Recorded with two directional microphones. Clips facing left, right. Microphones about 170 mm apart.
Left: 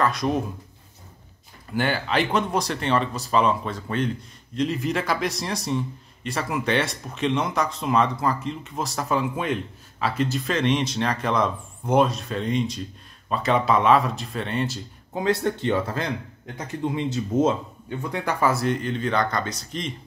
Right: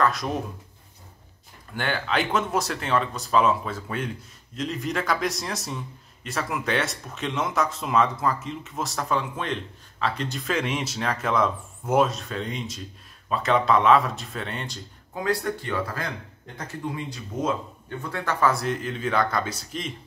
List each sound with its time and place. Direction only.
0.0 s speech: centre (ahead or behind)
1.7 s speech: 5° left (ahead or behind)
15.1 s speech: 25° left (ahead or behind)
17.8 s speech: 15° left (ahead or behind)
18.5 s speech: centre (ahead or behind)